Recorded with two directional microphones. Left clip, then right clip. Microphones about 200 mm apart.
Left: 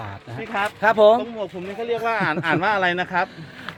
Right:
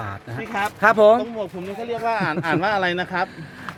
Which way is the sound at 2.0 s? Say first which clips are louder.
Even; 35° left (ahead or behind).